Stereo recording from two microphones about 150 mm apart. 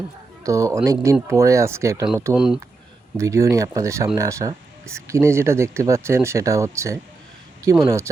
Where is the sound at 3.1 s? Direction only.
20° right (ahead or behind).